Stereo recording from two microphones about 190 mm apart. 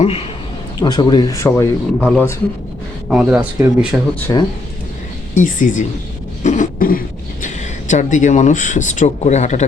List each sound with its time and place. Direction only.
0.0 s a man's voice: 35° left (ahead or behind)
0.8 s speech: 20° left (ahead or behind)
3.1 s speech: 5° right (ahead or behind)
4.3 s speech: 20° left (ahead or behind)
5.4 s a woman's voice: 40° left (ahead or behind)
6.4 s cough: 40° left (ahead or behind)
7.4 s speech: 40° left (ahead or behind)